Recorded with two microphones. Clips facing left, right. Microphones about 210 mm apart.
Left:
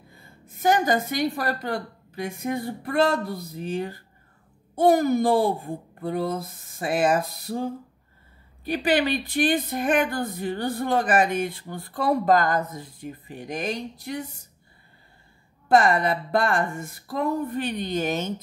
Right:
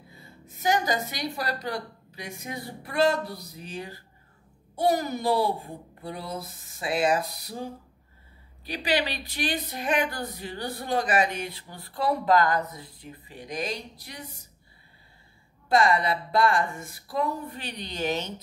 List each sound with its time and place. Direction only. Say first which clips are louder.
0.2 s speech: left 5 dB; 50° left (ahead or behind)
8.6 s speech: left 5 dB; 50° left (ahead or behind)
15.7 s speech: left 3 dB; 50° left (ahead or behind)